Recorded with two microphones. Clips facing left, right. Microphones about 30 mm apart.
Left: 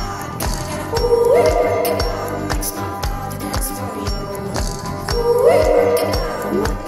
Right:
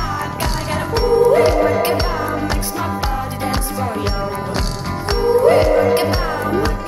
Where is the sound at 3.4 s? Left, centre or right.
Right.